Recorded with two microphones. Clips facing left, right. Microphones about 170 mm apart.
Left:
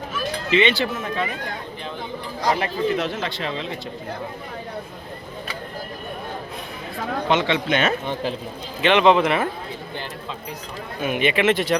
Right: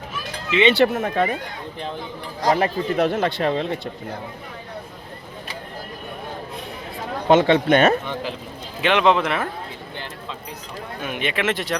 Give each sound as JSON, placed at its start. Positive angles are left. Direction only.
{"t": 0.8, "sound": "speech", "side_deg": -65}
{"t": 2.4, "sound": "a man's voice", "side_deg": -45}
{"t": 7.3, "sound": "a man's voice", "side_deg": -50}
{"t": 8.8, "sound": "speech", "side_deg": 0}
{"t": 11.0, "sound": "speech", "side_deg": 5}